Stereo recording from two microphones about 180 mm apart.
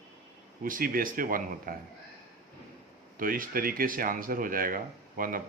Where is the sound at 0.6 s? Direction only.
50° right (ahead or behind).